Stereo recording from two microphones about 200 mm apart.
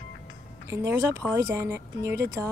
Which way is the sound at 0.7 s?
15° right (ahead or behind).